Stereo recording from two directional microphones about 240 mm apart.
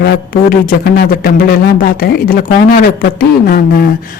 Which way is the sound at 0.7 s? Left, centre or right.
Left.